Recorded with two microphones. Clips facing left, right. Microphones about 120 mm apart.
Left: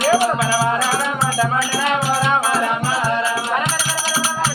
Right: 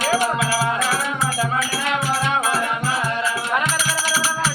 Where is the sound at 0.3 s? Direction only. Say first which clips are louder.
Left 3 dB; 35° left (ahead or behind).